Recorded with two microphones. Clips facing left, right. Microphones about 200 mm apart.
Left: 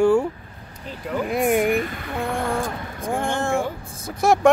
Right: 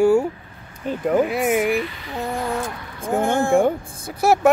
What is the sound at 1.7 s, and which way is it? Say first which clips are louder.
Speech: even; 50° left (ahead or behind).